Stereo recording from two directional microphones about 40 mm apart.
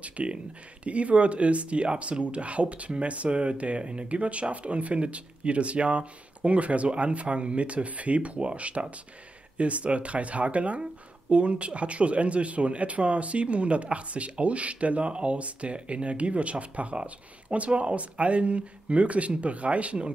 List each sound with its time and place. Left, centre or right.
0.0 s speech: right